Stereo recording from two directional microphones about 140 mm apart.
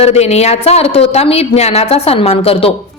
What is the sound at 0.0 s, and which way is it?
A woman's voice, 50° left (ahead or behind).